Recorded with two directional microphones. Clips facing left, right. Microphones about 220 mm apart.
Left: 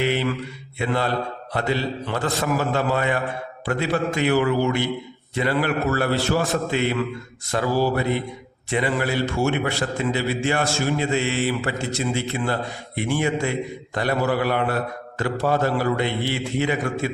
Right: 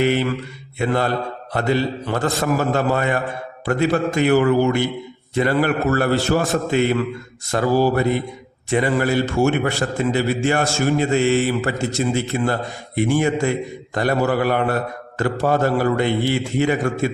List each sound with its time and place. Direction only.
0.0 s a man's voice: 45° right (ahead or behind)